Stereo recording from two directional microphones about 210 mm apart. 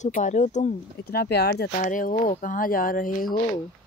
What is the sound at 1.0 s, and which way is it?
Speech, 50° left (ahead or behind).